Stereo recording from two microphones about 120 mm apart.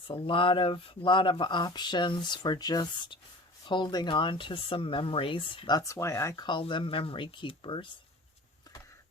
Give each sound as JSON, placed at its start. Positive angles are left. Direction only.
{"t": 0.1, "sound": "speech", "side_deg": 45}
{"t": 6.3, "sound": "speech", "side_deg": 40}